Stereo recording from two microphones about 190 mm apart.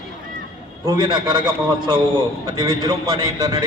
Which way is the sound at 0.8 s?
20° right (ahead or behind).